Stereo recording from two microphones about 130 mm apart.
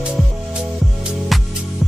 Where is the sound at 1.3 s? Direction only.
Centre (ahead or behind).